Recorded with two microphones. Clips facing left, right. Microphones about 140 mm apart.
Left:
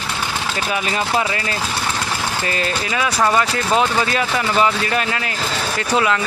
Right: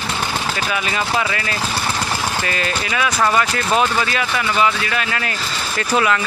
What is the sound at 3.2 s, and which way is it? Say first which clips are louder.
Speech: left 1 dB; 20° left (ahead or behind).